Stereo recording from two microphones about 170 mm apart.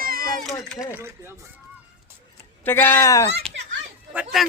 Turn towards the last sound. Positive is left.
turn(degrees=0)  # may be behind; listen again after turning